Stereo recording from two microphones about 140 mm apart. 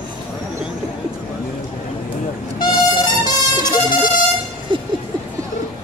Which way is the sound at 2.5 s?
30° left (ahead or behind).